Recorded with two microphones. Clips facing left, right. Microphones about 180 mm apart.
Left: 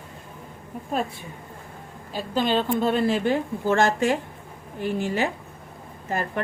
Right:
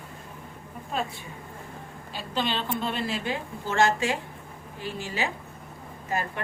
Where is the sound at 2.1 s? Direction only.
45° left (ahead or behind).